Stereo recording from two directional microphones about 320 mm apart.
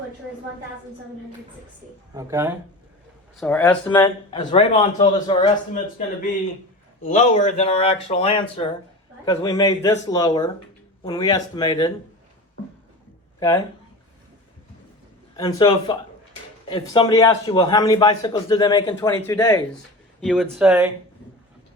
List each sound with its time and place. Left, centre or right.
2.1 s speech: centre
3.3 s a man's voice: centre
7.0 s a man's voice: left
15.4 s a man's voice: centre
20.2 s speech: centre